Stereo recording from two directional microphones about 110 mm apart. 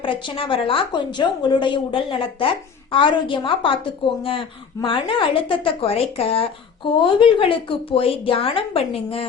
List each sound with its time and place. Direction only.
0.0 s a woman's voice: 50° left (ahead or behind)